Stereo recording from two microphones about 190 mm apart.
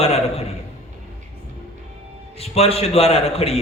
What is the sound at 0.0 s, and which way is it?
Speech, 30° left (ahead or behind).